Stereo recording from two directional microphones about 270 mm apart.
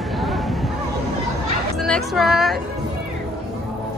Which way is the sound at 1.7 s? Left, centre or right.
Centre.